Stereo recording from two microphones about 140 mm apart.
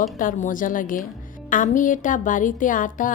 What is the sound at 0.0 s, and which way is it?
Speech, 70° left (ahead or behind).